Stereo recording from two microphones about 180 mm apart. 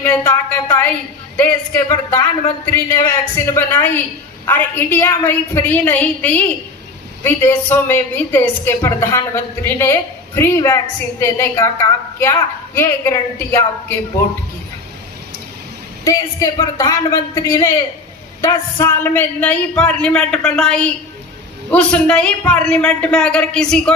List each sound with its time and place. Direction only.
0.0 s a woman's voice: 15° left (ahead or behind)
16.0 s a woman's voice: 15° left (ahead or behind)